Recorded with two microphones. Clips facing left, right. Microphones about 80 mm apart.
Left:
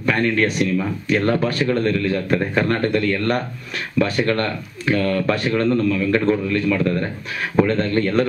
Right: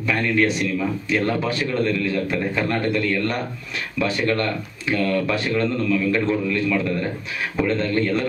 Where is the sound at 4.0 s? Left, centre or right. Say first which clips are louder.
Left 3 dB; left.